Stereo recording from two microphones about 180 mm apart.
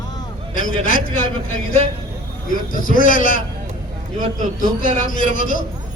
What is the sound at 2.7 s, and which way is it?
Speech, 50° left (ahead or behind).